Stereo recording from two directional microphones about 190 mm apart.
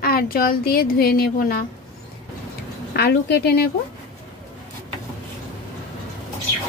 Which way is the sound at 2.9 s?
60° left (ahead or behind).